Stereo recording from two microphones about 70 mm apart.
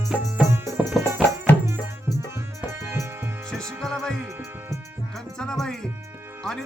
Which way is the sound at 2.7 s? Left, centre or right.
Right.